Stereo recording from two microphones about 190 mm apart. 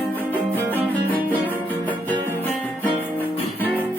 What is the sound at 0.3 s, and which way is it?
Music, 10° left (ahead or behind).